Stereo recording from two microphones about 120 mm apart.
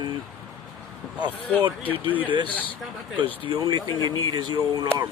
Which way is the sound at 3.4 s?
35° right (ahead or behind).